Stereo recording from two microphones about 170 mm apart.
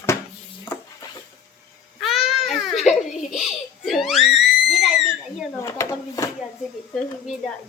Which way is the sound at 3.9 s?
Centre (ahead or behind).